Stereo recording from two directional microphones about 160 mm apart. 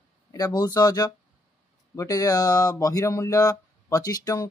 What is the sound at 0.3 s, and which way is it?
Speech, 25° left (ahead or behind).